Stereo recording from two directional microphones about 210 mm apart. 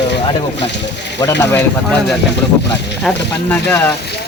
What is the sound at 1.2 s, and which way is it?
Speech, 10° left (ahead or behind).